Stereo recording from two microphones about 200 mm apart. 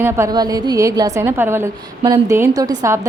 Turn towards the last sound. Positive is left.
turn(degrees=-15)  # may be behind; listen again after turning